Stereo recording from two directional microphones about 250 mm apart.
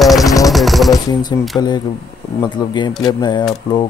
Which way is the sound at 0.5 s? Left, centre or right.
Centre.